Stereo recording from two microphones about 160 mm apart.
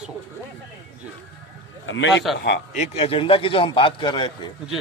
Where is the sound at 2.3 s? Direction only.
90° left.